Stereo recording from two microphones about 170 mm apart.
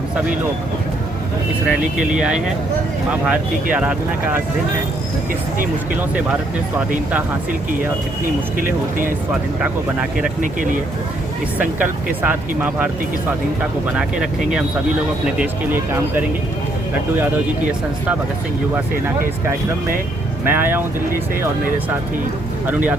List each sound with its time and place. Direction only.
1.6 s speech: 5° right (ahead or behind)
9.6 s speech: 5° right (ahead or behind)
10.4 s speech: 50° right (ahead or behind)
11.6 s speech: 10° right (ahead or behind)
13.9 s speech: 5° right (ahead or behind)
20.4 s speech: 10° right (ahead or behind)